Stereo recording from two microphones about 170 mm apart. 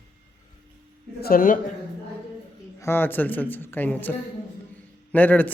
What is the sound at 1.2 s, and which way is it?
Speech, 55° left (ahead or behind).